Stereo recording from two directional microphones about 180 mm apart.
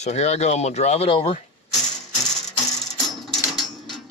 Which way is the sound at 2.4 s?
Centre (ahead or behind).